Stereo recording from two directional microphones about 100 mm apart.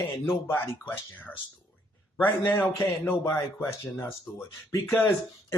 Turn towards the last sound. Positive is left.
turn(degrees=25)  # may be behind; listen again after turning